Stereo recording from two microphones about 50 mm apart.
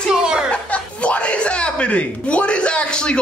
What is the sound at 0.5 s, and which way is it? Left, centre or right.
Speech, left.